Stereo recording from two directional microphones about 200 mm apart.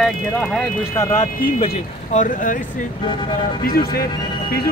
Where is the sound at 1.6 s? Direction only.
30° left (ahead or behind).